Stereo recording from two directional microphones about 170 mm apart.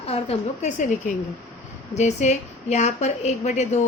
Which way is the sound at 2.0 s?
45° left (ahead or behind).